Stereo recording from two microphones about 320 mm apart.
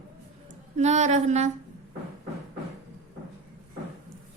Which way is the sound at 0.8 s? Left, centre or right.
Right.